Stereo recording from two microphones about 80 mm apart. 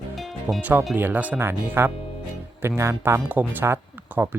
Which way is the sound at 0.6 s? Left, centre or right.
Right.